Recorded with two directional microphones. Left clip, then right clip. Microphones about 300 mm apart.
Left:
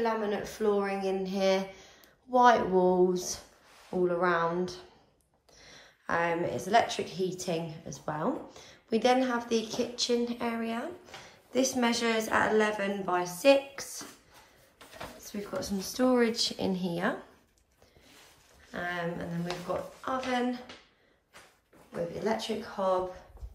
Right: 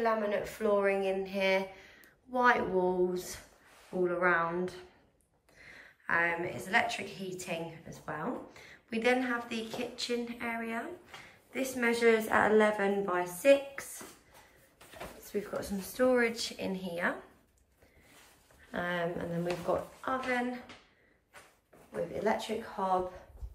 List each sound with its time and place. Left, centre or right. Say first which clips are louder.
0.0 s speech: even; centre
15.2 s speech: even; centre
18.7 s speech: even; centre
22.1 s speech: right 1 dB; centre